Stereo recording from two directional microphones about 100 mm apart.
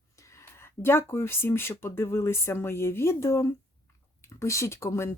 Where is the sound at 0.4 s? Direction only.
25° left (ahead or behind).